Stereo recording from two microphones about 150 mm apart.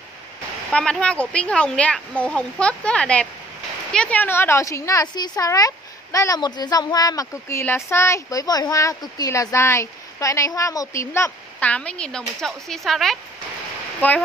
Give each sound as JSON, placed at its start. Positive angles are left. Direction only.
{"t": 0.7, "sound": "a woman's voice", "side_deg": 5}